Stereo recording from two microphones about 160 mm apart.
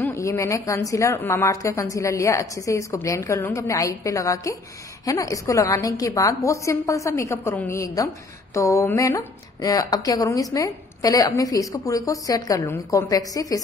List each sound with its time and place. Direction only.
0.0 s speech: 20° left (ahead or behind)